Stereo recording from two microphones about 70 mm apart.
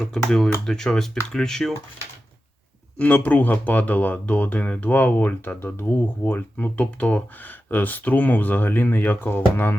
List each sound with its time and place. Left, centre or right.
0.0 s speech: centre
3.0 s speech: left